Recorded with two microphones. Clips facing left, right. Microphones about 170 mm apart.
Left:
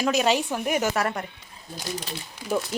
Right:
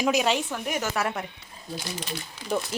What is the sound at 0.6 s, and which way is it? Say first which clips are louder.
Speech: left 5 dB; 10° left (ahead or behind).